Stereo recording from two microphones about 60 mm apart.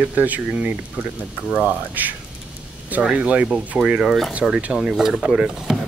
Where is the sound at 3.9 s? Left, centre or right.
Centre.